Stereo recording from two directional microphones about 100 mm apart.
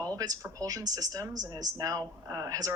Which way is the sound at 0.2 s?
35° right (ahead or behind).